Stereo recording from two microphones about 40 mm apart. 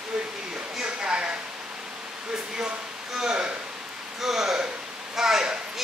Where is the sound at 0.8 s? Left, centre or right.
Right.